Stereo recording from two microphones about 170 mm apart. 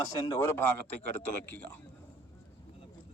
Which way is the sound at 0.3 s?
15° left (ahead or behind).